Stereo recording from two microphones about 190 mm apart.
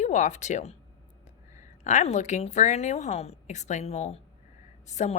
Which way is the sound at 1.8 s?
40° left (ahead or behind).